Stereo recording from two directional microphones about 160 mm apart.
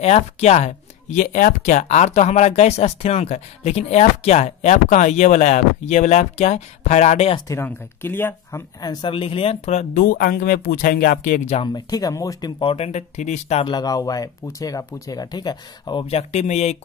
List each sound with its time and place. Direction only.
0.0 s speech: 45° left (ahead or behind)
7.3 s speech: 20° left (ahead or behind)
9.0 s speech: 35° left (ahead or behind)
10.0 s speech: 65° left (ahead or behind)
11.6 s speech: 25° left (ahead or behind); by 13.7 s 45° left (ahead or behind)
13.7 s speech: 25° left (ahead or behind); by 16.7 s 45° left (ahead or behind)